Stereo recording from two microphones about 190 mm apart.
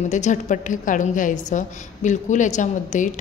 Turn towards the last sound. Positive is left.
turn(degrees=40)  # may be behind; listen again after turning